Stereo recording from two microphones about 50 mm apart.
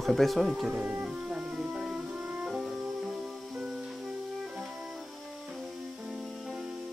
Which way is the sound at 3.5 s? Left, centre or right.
Centre.